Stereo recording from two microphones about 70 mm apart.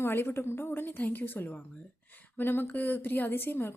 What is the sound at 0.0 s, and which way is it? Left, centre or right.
Speech, left.